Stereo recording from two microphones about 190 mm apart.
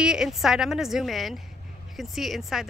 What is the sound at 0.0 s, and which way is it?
Speech, 5° right (ahead or behind).